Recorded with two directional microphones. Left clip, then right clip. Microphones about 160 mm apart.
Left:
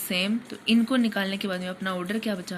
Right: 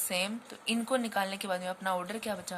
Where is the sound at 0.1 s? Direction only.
50° right (ahead or behind).